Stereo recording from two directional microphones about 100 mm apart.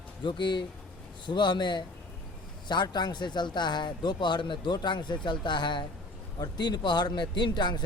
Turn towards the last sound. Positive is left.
turn(degrees=50)  # may be behind; listen again after turning